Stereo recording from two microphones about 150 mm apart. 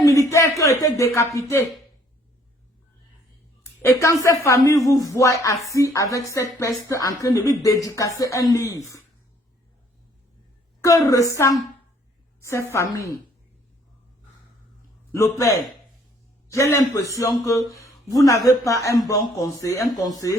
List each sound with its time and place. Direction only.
0.0 s a sound: 20° left (ahead or behind)
3.6 s a man's voice: 20° left (ahead or behind)
10.8 s a man's voice: 20° left (ahead or behind)
15.1 s a man's voice: 20° left (ahead or behind)